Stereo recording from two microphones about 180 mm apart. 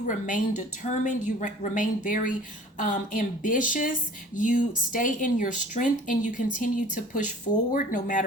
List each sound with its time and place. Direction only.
0.0 s speech: 45° left (ahead or behind)